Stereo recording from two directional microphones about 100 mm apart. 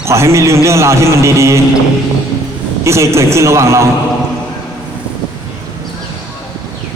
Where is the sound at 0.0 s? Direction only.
30° right (ahead or behind).